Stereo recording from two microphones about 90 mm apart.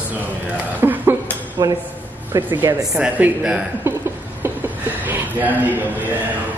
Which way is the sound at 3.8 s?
25° right (ahead or behind).